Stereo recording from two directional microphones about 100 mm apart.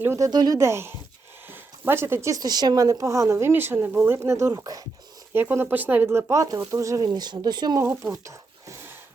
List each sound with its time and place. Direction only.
0.0 s speech: 25° right (ahead or behind)
0.3 s speech: 45° right (ahead or behind)
0.6 s speech: 25° right (ahead or behind)
1.5 s a sound: 20° right (ahead or behind)
2.3 s a woman's voice: 40° right (ahead or behind)
4.5 s a woman's voice: 35° right (ahead or behind)
5.3 s a woman's voice: 20° right (ahead or behind)
7.1 s speech: 45° right (ahead or behind)
8.1 s a sound: 30° right (ahead or behind)